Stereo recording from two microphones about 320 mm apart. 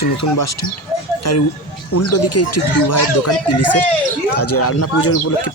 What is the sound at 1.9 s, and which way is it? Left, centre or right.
Speech, left.